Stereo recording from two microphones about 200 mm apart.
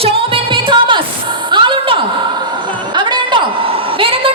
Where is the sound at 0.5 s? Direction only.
25° right (ahead or behind).